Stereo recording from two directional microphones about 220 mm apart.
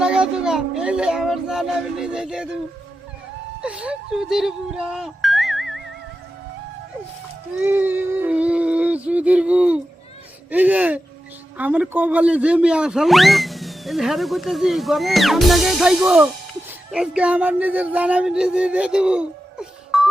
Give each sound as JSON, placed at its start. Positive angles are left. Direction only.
{"t": 0.0, "sound": "speech", "side_deg": -5}
{"t": 3.6, "sound": "speech", "side_deg": -5}
{"t": 7.6, "sound": "a sound", "side_deg": -10}
{"t": 10.5, "sound": "speech", "side_deg": -5}